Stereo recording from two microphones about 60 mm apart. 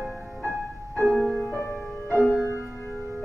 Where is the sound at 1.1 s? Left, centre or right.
Centre.